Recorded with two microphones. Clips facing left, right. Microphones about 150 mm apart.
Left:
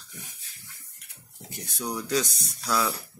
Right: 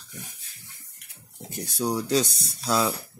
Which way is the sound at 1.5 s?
35° right (ahead or behind).